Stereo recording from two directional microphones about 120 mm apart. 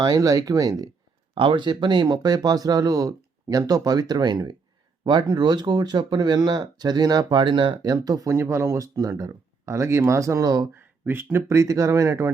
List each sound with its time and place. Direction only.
0.0 s speech: 30° right (ahead or behind)
1.4 s speech: 45° right (ahead or behind)
10.8 s speech: 20° right (ahead or behind)